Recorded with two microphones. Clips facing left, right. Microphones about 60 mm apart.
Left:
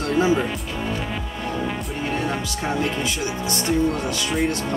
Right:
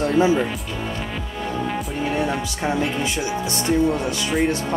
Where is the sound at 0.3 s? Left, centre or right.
Centre.